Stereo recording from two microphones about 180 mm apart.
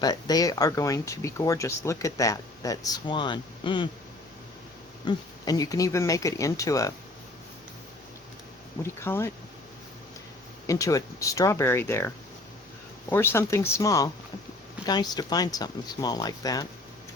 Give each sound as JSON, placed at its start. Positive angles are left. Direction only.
{"t": 0.0, "sound": "speech", "side_deg": 20}
{"t": 5.0, "sound": "speech", "side_deg": 20}
{"t": 8.8, "sound": "speech", "side_deg": 15}
{"t": 10.7, "sound": "speech", "side_deg": 20}